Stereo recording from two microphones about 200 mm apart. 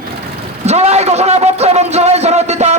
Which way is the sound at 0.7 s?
35° right (ahead or behind).